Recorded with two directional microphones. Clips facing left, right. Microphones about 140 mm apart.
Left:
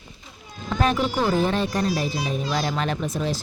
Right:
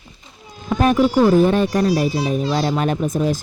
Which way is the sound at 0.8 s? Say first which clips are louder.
Right 8 dB; 45° right (ahead or behind).